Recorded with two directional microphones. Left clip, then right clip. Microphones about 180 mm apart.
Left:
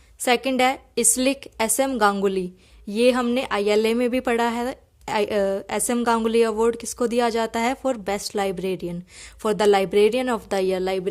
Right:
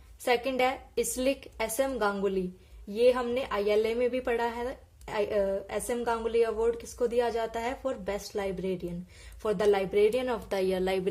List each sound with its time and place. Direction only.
0.3 s a woman's voice: 40° left (ahead or behind)